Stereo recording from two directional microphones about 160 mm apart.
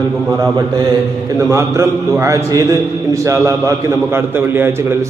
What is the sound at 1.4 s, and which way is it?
A man's voice, 20° right (ahead or behind).